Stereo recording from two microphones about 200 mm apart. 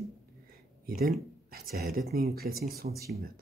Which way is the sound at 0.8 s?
45° right (ahead or behind).